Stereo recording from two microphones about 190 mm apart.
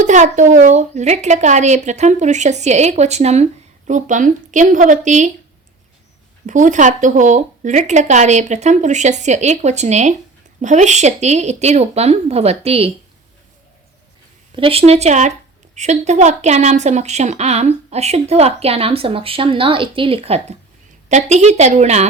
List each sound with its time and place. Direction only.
0.0 s a woman's voice: 40° right (ahead or behind)
6.4 s a woman's voice: 40° right (ahead or behind)
14.5 s a woman's voice: 30° right (ahead or behind)